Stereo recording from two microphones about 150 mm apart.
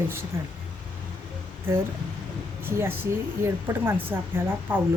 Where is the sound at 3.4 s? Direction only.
15° right (ahead or behind).